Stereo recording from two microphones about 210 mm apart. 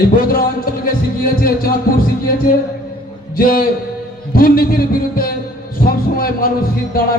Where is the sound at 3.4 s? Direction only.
45° left (ahead or behind).